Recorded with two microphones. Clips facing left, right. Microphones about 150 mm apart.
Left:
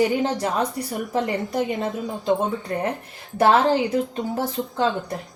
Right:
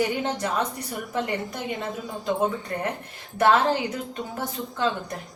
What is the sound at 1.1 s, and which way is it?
A woman's voice, 30° left (ahead or behind).